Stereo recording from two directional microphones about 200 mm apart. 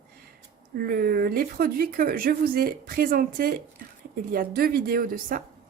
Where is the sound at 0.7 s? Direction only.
50° right (ahead or behind).